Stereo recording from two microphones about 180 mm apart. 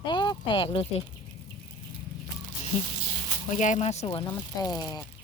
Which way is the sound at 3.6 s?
40° left (ahead or behind).